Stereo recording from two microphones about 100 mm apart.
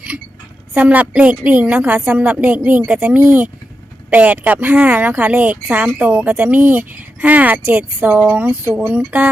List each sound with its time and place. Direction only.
0.7 s speech: 15° right (ahead or behind)